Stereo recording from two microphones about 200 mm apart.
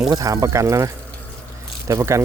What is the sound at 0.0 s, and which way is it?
Speech, 15° right (ahead or behind).